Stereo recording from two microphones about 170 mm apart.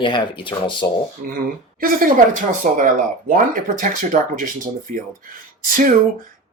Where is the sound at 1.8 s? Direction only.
55° right (ahead or behind).